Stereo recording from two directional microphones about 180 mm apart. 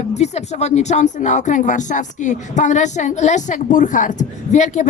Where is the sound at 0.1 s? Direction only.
40° left (ahead or behind).